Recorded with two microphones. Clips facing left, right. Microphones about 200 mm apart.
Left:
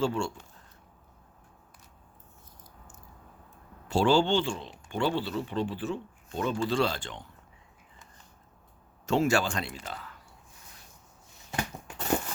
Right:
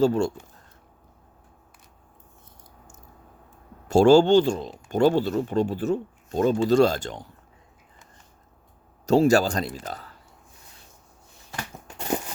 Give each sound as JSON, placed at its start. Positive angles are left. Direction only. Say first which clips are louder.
{"t": 0.0, "sound": "speech", "louder": "right 8 dB", "side_deg": -40}
{"t": 3.8, "sound": "speech", "louder": "right 9 dB", "side_deg": -45}
{"t": 9.0, "sound": "speech", "louder": "right 7 dB", "side_deg": -40}